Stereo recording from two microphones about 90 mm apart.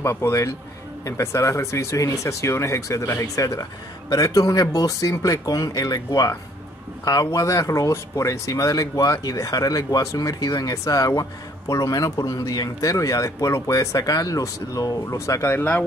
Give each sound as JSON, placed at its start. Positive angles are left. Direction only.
{"t": 0.0, "sound": "speech", "side_deg": 30}
{"t": 7.3, "sound": "speech", "side_deg": 40}